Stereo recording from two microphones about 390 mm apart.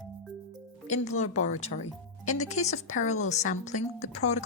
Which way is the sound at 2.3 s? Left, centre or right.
Centre.